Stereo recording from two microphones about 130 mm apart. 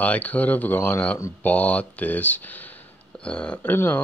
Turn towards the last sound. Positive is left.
turn(degrees=15)  # may be behind; listen again after turning